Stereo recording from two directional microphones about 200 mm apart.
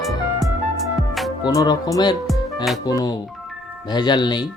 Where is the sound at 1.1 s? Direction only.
Centre (ahead or behind).